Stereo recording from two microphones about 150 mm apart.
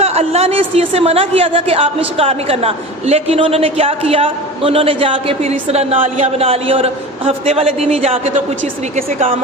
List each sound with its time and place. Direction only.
0.0 s a man's voice: 45° right (ahead or behind)